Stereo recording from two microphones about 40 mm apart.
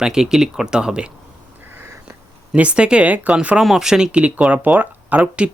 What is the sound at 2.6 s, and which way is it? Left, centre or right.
Speech, right.